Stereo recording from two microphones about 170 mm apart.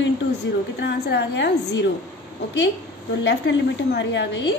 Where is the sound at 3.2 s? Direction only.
90° left.